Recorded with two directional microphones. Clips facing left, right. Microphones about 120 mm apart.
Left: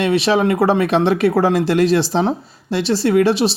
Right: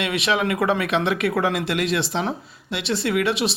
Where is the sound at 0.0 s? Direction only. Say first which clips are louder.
Left 7 dB; 35° left (ahead or behind).